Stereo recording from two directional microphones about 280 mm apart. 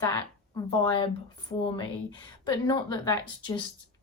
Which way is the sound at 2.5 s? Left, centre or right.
Centre.